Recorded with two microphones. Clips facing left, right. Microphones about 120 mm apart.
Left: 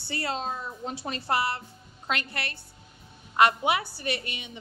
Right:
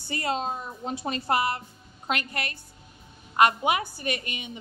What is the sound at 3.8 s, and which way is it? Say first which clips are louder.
Speech: right 1 dB; 50° right (ahead or behind).